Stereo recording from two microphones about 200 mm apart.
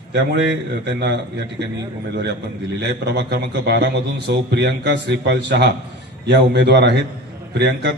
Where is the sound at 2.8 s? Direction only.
55° right (ahead or behind).